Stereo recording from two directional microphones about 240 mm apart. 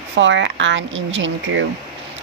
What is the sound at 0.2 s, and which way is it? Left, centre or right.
Speech, right.